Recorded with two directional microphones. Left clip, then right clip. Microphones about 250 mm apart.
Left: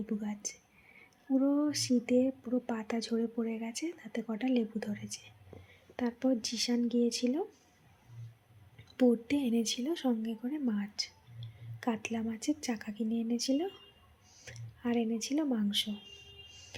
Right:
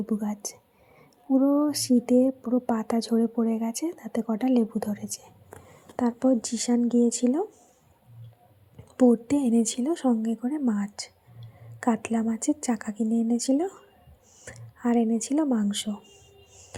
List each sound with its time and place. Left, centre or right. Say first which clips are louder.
0.0 s a woman's voice: right 8 dB; centre
9.0 s a woman's voice: right 7 dB; centre
14.3 s a sound: right 6 dB; centre